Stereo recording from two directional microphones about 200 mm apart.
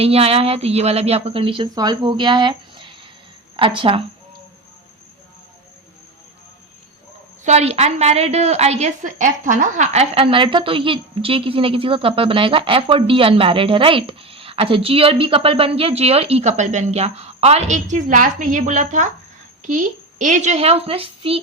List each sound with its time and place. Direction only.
0.0 s a woman's voice: 30° right (ahead or behind)
7.4 s a woman's voice: 35° right (ahead or behind)